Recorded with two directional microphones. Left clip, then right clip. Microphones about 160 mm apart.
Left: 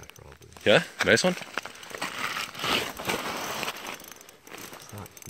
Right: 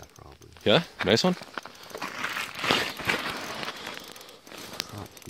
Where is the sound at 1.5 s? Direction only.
75° left (ahead or behind).